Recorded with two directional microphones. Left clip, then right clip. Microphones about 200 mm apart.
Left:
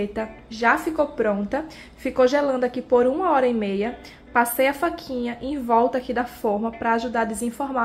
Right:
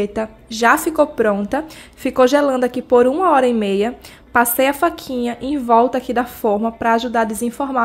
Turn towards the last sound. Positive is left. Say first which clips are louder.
# right 6 dB
turn(degrees=-35)  # may be behind; listen again after turning